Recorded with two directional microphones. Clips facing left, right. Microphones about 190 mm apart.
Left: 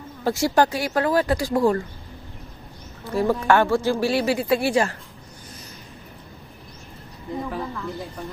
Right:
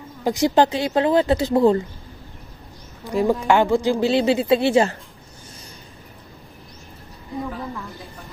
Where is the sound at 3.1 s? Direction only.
15° right (ahead or behind).